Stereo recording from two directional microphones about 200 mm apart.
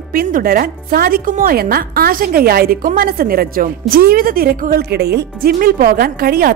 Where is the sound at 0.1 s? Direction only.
45° right (ahead or behind).